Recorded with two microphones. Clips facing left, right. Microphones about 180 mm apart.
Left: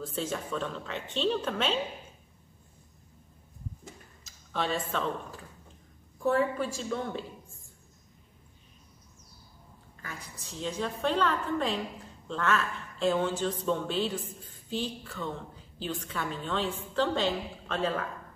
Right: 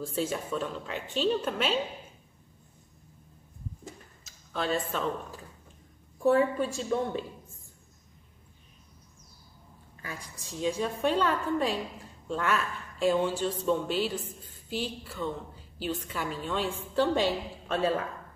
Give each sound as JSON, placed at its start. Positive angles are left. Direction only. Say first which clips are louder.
{"t": 0.0, "sound": "a woman's voice", "louder": "right 2 dB", "side_deg": -10}
{"t": 4.2, "sound": "a sound", "louder": "even", "side_deg": 0}
{"t": 6.2, "sound": "a woman's voice", "louder": "right 3 dB", "side_deg": -20}
{"t": 10.0, "sound": "a woman's voice", "louder": "right 2 dB", "side_deg": -10}